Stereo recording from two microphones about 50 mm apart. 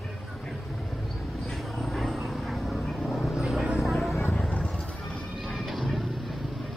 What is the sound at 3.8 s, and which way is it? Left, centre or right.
Vehicle, centre.